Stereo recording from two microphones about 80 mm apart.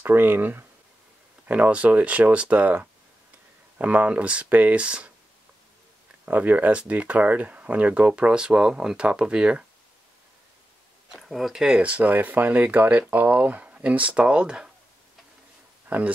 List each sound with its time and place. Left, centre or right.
0.0 s speech: right
1.5 s speech: centre
6.2 s speech: centre
11.1 s speech: centre
11.8 s speech: centre
15.9 s speech: centre